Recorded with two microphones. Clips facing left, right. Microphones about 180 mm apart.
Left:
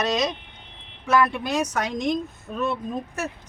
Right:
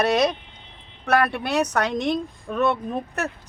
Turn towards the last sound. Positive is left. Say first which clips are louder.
# right 2 dB
turn(degrees=-65)  # may be behind; listen again after turning